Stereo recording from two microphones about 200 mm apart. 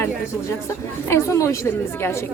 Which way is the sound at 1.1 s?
15° left (ahead or behind).